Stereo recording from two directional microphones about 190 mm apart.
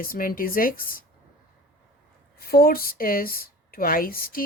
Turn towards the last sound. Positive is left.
turn(degrees=50)  # may be behind; listen again after turning